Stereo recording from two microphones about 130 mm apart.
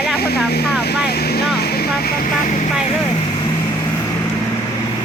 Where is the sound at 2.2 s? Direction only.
75° left (ahead or behind).